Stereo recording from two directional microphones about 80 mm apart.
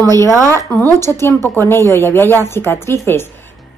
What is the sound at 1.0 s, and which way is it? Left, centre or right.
A woman's voice, left.